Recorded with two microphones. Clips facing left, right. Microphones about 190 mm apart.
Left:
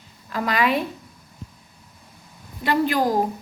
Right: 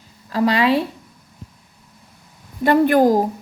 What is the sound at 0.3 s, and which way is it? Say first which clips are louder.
Speech: right 5 dB; 30° right (ahead or behind).